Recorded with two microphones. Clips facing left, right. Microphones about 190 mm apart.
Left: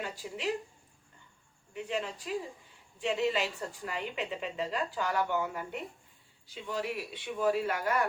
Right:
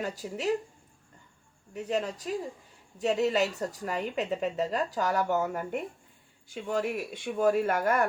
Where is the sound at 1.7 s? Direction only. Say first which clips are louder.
Right 5 dB; 40° right (ahead or behind).